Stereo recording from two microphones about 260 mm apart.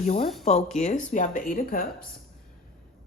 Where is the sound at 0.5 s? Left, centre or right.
Left.